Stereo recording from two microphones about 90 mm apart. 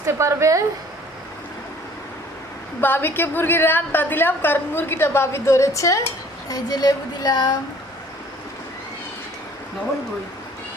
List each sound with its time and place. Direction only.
0.0 s a woman's voice: 30° right (ahead or behind)
2.8 s a woman's voice: 25° left (ahead or behind)
6.5 s a sound: 45° left (ahead or behind)